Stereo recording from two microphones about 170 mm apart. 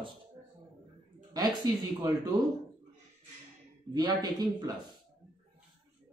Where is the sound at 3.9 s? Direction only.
25° right (ahead or behind).